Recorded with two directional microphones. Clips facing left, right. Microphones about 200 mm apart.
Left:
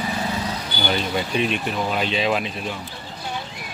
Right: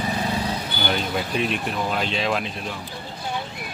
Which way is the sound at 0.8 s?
Centre (ahead or behind).